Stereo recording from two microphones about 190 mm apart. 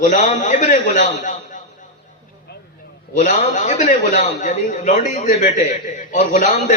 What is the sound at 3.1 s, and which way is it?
A man's voice, 40° left (ahead or behind).